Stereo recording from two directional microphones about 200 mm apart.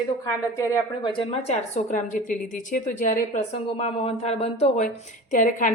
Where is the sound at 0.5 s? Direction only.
20° left (ahead or behind); by 5.7 s 40° left (ahead or behind).